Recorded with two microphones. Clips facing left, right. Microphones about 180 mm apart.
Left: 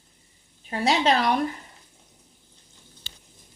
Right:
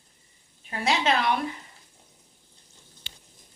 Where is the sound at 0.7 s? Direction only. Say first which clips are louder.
Left 3 dB; 35° left (ahead or behind).